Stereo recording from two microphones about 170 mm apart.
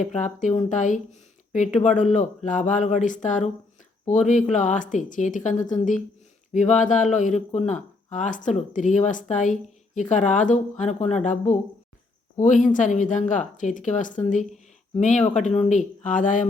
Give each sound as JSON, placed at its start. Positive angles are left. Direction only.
{"t": 0.0, "sound": "speech", "side_deg": 45}